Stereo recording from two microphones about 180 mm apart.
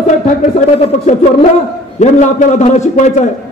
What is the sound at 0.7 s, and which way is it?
A man's voice, 35° left (ahead or behind).